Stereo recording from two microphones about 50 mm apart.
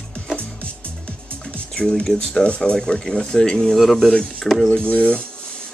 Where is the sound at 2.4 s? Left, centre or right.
Left.